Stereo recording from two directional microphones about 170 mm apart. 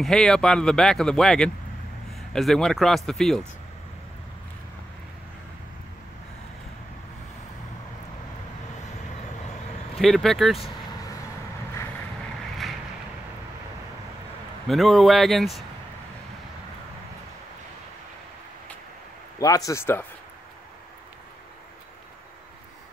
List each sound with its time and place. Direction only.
0.0 s speech: centre (ahead or behind)
9.9 s speech: centre (ahead or behind)
14.7 s speech: centre (ahead or behind)
19.4 s speech: 20° left (ahead or behind)